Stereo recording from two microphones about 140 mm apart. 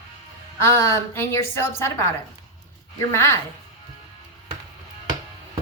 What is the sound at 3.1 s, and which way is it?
Speech, 20° left (ahead or behind).